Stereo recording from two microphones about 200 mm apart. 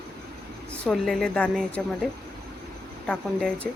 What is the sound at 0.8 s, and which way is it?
Speech, centre (ahead or behind).